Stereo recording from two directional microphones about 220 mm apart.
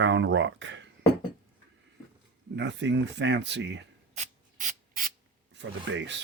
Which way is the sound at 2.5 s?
55° right (ahead or behind).